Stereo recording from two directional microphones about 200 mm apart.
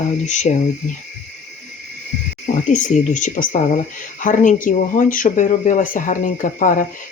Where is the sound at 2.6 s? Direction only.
40° left (ahead or behind).